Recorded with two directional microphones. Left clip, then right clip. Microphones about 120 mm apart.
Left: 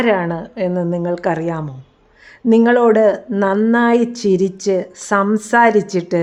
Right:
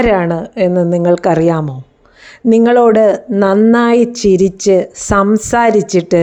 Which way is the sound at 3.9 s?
30° right (ahead or behind).